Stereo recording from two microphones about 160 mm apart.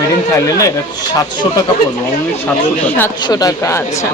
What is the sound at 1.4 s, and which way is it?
Speech, 30° left (ahead or behind).